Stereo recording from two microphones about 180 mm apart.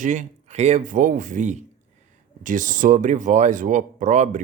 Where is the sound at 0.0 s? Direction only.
45° right (ahead or behind).